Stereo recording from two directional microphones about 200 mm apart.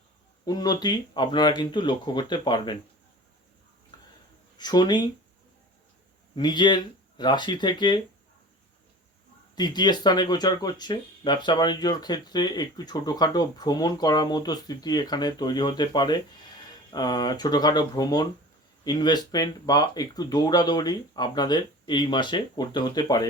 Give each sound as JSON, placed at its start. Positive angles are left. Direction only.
{"t": 0.4, "sound": "speech", "side_deg": 20}
{"t": 3.9, "sound": "a sound", "side_deg": 20}
{"t": 4.5, "sound": "speech", "side_deg": 20}
{"t": 6.3, "sound": "speech", "side_deg": 20}
{"t": 9.6, "sound": "speech", "side_deg": 20}